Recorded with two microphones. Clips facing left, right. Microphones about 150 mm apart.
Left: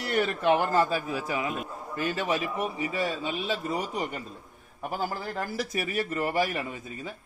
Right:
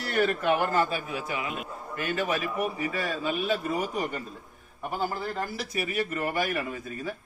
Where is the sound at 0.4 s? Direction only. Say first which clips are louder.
Left 2 dB; 30° left (ahead or behind).